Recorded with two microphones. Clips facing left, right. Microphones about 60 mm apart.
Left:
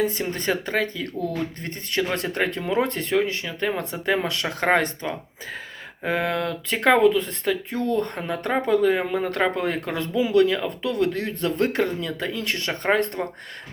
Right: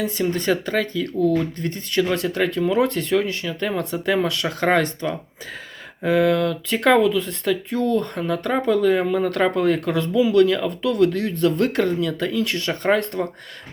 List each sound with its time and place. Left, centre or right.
0.0 s speech: left